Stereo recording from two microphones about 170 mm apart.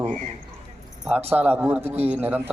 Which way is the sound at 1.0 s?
10° right (ahead or behind).